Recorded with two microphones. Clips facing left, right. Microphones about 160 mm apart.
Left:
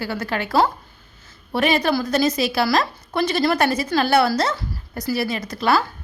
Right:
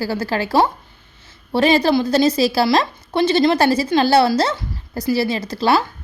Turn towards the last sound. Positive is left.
turn(degrees=-30)  # may be behind; listen again after turning